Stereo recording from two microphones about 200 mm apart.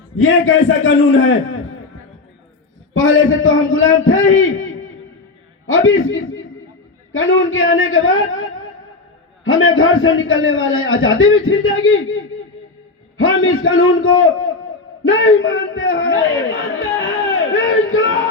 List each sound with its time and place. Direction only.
0.2 s a man's voice: 90° left
2.9 s a man's voice: 80° left
17.1 s a sound: 85° left